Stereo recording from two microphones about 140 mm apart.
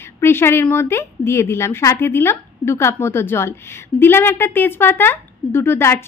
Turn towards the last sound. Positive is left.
turn(degrees=15)  # may be behind; listen again after turning